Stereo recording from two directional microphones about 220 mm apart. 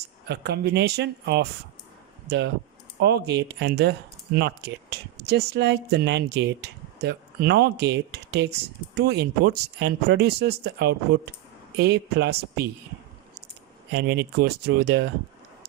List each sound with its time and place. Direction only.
0.3 s speech: 50° right (ahead or behind)
13.9 s speech: 50° right (ahead or behind)